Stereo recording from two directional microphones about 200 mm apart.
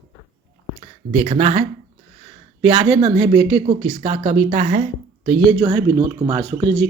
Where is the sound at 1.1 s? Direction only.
35° right (ahead or behind).